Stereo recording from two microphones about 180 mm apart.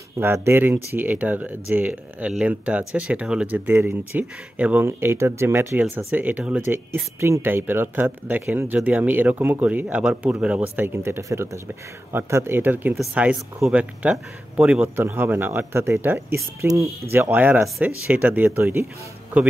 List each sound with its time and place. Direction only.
0.2 s speech: 10° right (ahead or behind)